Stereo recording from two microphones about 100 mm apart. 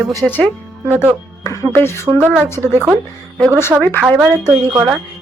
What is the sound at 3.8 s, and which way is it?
Speech, 10° left (ahead or behind).